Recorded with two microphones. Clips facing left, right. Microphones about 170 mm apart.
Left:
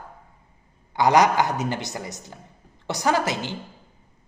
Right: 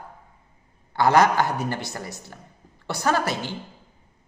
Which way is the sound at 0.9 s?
15° left (ahead or behind).